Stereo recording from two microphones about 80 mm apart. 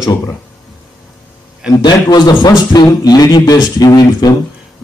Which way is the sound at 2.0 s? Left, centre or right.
Left.